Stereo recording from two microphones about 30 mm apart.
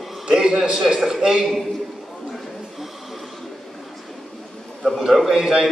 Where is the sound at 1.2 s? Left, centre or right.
Centre.